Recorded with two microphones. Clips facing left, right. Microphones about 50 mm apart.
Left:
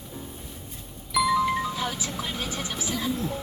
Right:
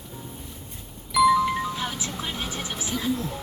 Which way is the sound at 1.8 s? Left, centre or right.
Right.